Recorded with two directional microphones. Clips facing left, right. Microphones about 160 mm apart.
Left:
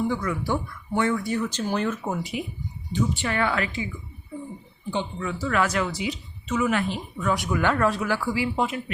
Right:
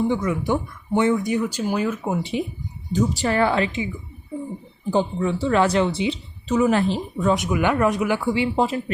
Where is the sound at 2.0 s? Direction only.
25° right (ahead or behind).